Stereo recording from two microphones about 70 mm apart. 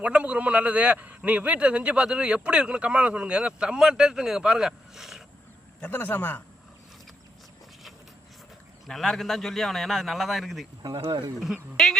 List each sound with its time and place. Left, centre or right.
0.0 s speech: centre
5.8 s a man's voice: left
8.9 s a man's voice: centre
10.8 s speech: right
11.8 s a man's voice: centre